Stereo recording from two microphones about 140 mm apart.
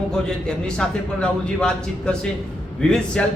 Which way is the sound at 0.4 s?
5° left (ahead or behind).